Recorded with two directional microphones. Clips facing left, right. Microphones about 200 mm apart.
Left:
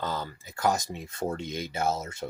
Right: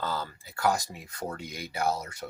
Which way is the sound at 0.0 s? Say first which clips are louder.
Left 1 dB; 20° left (ahead or behind).